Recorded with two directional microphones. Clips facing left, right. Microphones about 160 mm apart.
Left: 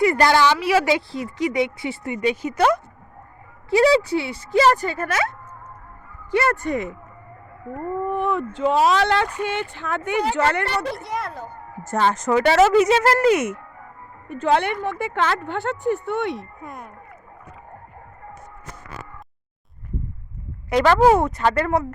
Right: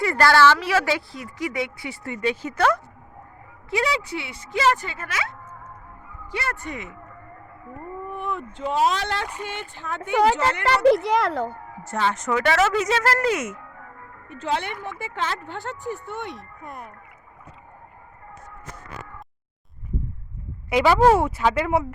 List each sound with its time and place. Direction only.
0.0 s a woman's voice: 20° left (ahead or behind)
3.7 s speech: 35° left (ahead or behind)
6.3 s speech: 50° left (ahead or behind)
7.8 s a sound: 70° left (ahead or behind)
8.5 s speech: 90° left; by 10.6 s 65° left (ahead or behind)
10.7 s speech: 90° right
11.8 s speech: 45° left (ahead or behind); by 13.5 s 30° left (ahead or behind)
14.3 s speech: 60° left (ahead or behind)
16.6 s speech: centre (ahead or behind)
20.7 s speech: 5° right (ahead or behind)